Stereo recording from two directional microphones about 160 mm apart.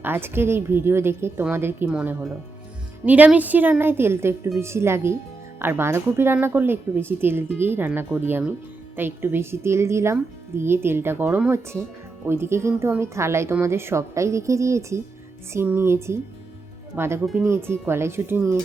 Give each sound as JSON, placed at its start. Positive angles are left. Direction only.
{"t": 0.0, "sound": "speech", "side_deg": -15}